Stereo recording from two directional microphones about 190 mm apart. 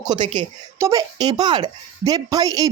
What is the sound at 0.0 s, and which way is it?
Speech, 25° right (ahead or behind).